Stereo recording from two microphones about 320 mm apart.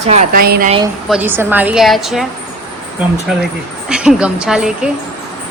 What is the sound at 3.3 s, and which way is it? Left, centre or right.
A woman's voice, centre.